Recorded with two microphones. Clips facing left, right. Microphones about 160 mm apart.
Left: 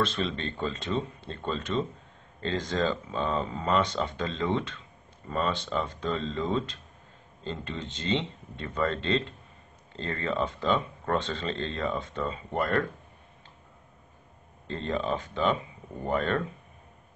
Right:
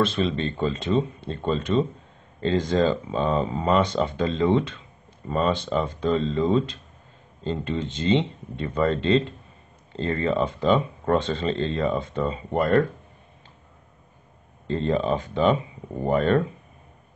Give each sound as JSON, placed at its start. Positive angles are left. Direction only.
{"t": 0.0, "sound": "speech", "side_deg": -15}
{"t": 14.7, "sound": "speech", "side_deg": -20}